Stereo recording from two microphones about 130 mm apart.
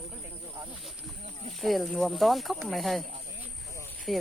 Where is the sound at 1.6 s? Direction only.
Centre (ahead or behind).